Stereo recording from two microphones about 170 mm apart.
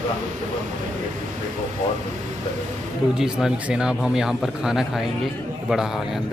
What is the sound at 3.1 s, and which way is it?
Speech, 5° right (ahead or behind).